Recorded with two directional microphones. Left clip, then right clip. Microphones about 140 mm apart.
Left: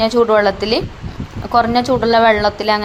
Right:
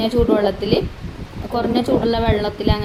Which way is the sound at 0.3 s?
15° left (ahead or behind).